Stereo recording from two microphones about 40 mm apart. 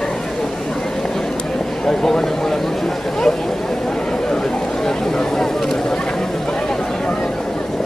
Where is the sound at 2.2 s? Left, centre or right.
Centre.